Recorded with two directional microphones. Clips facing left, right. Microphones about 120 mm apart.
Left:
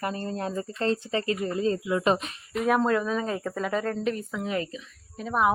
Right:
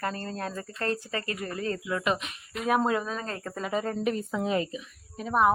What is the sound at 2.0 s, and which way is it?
Speech, 35° left (ahead or behind).